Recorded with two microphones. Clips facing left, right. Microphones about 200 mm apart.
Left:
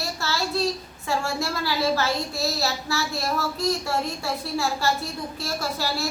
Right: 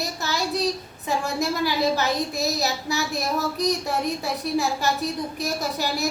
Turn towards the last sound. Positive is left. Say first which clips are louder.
# right 2 dB
turn(degrees=-20)  # may be behind; listen again after turning